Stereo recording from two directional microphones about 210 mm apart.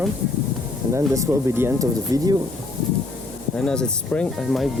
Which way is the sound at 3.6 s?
5° left (ahead or behind).